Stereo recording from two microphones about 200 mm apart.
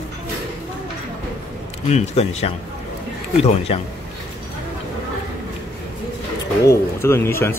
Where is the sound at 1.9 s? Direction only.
30° left (ahead or behind).